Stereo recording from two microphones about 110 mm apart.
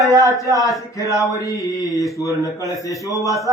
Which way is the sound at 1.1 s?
30° left (ahead or behind).